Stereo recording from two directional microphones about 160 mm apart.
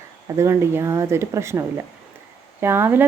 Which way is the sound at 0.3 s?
15° right (ahead or behind).